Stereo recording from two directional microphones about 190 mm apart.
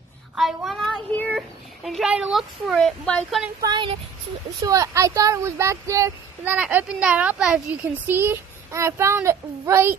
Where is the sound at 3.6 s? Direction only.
25° right (ahead or behind).